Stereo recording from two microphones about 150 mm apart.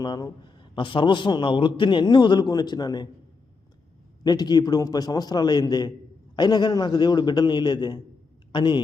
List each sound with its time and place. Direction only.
0.0 s a man's voice: 30° left (ahead or behind)
4.2 s a man's voice: 25° left (ahead or behind)